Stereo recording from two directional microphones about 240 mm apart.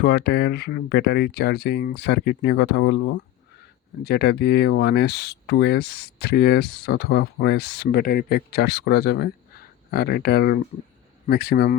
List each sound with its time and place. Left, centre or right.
0.0 s speech: left